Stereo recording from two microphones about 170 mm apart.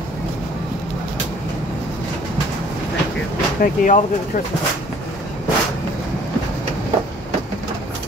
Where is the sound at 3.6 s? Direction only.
50° left (ahead or behind).